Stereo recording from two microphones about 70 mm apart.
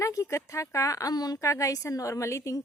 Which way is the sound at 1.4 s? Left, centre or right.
Left.